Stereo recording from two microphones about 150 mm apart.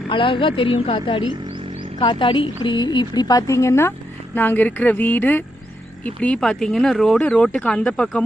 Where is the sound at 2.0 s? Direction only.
30° left (ahead or behind).